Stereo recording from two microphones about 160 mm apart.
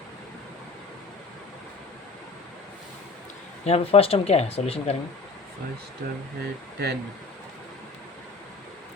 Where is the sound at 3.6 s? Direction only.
40° left (ahead or behind).